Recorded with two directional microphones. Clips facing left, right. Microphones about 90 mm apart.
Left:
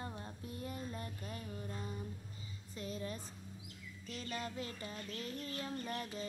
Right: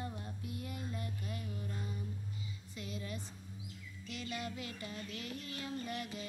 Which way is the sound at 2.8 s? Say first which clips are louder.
Left 2 dB; 35° left (ahead or behind).